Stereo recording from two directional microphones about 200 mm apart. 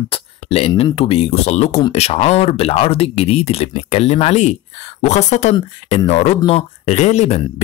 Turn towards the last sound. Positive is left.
turn(degrees=35)  # may be behind; listen again after turning